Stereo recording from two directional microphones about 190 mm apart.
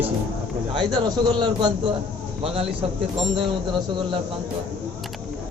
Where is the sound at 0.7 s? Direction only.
25° right (ahead or behind).